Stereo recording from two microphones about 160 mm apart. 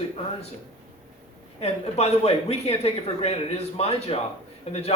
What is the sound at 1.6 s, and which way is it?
Speech, 40° left (ahead or behind).